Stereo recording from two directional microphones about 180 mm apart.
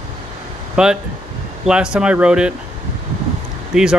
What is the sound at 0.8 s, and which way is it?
Speech, 5° right (ahead or behind).